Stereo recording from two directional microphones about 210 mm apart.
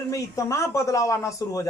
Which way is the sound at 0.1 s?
15° left (ahead or behind).